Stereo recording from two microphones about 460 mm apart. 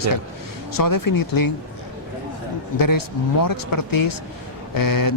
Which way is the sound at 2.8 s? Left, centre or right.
Left.